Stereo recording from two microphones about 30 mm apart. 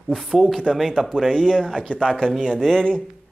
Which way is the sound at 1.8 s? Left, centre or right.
Left.